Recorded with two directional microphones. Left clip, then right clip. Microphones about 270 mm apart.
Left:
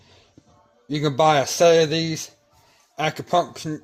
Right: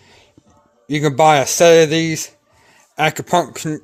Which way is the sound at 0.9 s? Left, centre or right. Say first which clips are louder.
Right 6 dB; right.